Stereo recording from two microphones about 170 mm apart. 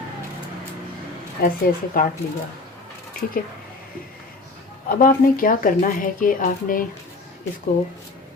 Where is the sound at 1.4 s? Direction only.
55° left (ahead or behind).